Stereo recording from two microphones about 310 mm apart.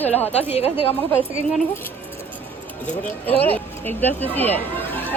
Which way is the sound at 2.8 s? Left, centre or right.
Centre.